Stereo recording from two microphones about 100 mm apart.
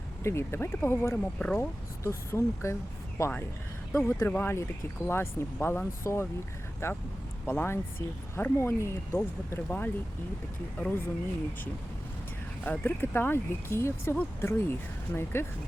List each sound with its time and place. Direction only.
0.2 s speech: 25° left (ahead or behind)
12.6 s speech: 20° left (ahead or behind)